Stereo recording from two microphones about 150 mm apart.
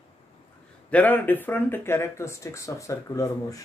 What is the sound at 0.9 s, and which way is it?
Speech, 10° left (ahead or behind).